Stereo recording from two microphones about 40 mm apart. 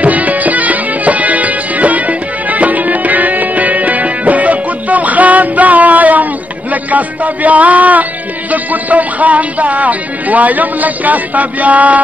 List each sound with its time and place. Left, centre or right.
0.0 s music: right